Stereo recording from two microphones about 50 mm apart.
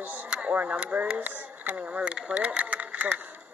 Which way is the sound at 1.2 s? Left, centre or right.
Right.